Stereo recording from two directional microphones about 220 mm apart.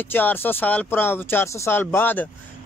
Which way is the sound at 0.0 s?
10° left (ahead or behind).